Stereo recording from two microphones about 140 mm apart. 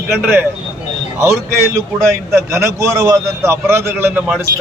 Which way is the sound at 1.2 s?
20° right (ahead or behind).